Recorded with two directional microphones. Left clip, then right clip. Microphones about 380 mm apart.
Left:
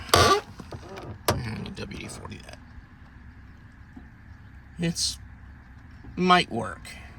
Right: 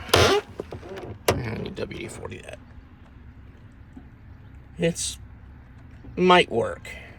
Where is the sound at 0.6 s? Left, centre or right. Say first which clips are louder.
Right 3 dB; left.